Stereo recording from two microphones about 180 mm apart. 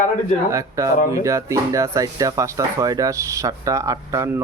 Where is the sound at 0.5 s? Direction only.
15° right (ahead or behind).